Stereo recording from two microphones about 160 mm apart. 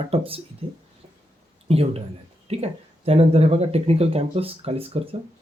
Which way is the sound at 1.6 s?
40° right (ahead or behind).